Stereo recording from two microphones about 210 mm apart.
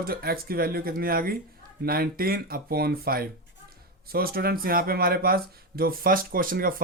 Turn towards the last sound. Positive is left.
turn(degrees=-45)  # may be behind; listen again after turning